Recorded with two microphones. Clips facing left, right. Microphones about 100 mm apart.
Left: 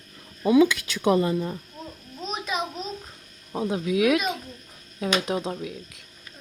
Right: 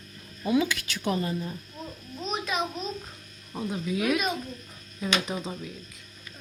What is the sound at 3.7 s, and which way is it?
Speech, 85° left.